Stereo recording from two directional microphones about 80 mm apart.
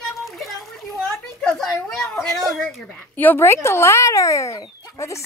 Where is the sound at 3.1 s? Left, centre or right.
Left.